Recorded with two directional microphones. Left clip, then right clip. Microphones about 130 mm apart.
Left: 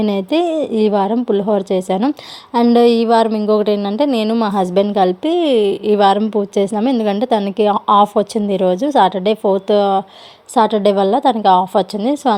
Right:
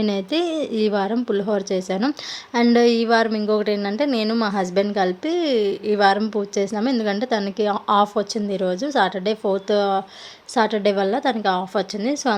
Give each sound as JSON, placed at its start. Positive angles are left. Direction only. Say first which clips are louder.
{"t": 0.0, "sound": "a woman's voice", "louder": "left 6 dB", "side_deg": 35}
{"t": 3.6, "sound": "a woman's voice", "louder": "left 6 dB", "side_deg": 40}
{"t": 4.5, "sound": "a woman's voice", "louder": "left 8 dB", "side_deg": 40}